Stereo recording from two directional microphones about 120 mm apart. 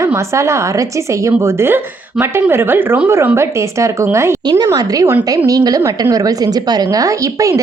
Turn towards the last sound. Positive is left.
turn(degrees=-25)  # may be behind; listen again after turning